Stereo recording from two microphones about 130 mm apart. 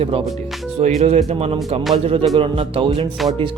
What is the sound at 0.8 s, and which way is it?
Speech, 55° right (ahead or behind).